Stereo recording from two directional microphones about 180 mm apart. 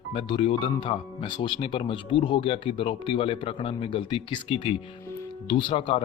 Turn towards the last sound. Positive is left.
turn(degrees=30)  # may be behind; listen again after turning